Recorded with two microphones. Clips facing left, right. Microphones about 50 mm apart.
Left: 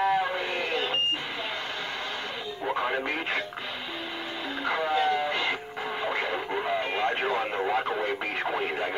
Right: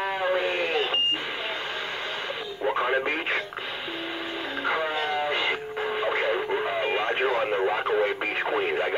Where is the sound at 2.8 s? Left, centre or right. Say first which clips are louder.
Right 4 dB; right.